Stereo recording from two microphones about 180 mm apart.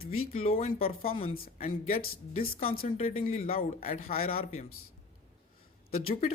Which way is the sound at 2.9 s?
35° left (ahead or behind).